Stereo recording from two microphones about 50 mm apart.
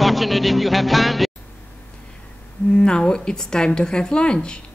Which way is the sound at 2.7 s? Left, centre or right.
Centre.